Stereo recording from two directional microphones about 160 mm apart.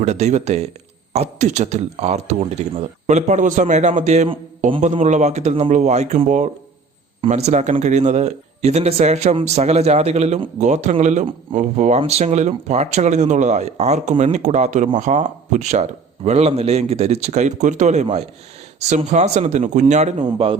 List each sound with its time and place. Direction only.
0.0 s speech: 45° right (ahead or behind)
20.2 s speech: 30° right (ahead or behind)